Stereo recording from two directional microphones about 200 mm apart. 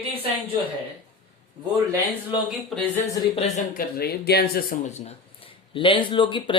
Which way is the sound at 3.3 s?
35° left (ahead or behind).